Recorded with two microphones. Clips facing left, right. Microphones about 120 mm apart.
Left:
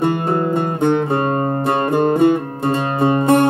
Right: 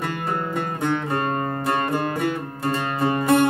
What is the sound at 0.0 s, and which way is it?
Music, 25° left (ahead or behind).